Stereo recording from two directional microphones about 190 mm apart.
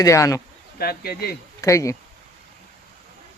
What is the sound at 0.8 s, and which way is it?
Speech, 55° left (ahead or behind).